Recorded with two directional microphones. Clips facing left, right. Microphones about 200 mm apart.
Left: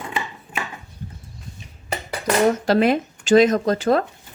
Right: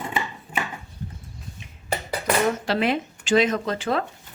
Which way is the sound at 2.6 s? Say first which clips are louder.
Left 6 dB; 45° left (ahead or behind).